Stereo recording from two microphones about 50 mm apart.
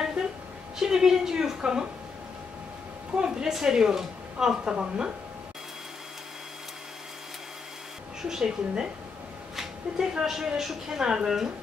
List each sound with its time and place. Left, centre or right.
0.7 s a woman's voice: centre
3.2 s a woman's voice: centre
8.2 s a woman's voice: centre